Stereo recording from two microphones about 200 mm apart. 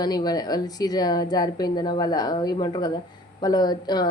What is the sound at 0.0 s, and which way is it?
Speech, 20° left (ahead or behind).